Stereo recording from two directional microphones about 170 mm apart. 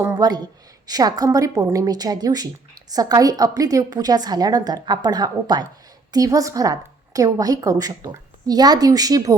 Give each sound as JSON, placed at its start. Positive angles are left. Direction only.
{"t": 0.0, "sound": "a woman's voice", "side_deg": -20}